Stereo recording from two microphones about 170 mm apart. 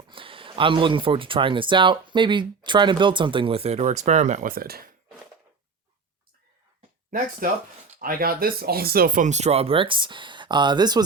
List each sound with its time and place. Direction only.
0.1 s speech: 30° right (ahead or behind); by 4.9 s 60° right (ahead or behind)
7.1 s speech: 50° right (ahead or behind); by 11.0 s 25° right (ahead or behind)